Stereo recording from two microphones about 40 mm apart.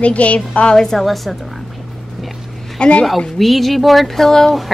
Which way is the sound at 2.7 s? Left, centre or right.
Left.